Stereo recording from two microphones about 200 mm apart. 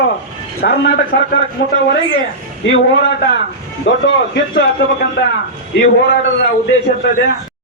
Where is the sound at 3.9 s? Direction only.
65° left (ahead or behind).